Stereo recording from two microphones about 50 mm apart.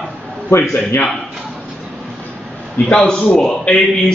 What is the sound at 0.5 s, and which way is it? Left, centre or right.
Speech, left.